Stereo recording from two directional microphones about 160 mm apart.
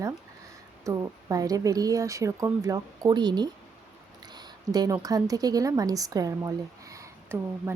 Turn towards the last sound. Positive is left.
turn(degrees=-15)  # may be behind; listen again after turning